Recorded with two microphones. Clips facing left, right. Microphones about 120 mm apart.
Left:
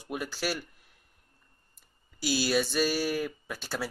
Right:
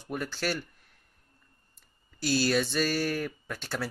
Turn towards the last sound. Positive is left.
turn(degrees=5)  # may be behind; listen again after turning